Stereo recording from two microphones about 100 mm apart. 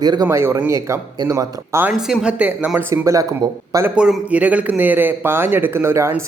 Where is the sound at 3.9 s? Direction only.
10° right (ahead or behind).